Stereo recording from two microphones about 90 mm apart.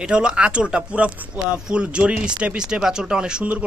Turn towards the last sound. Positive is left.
turn(degrees=-10)  # may be behind; listen again after turning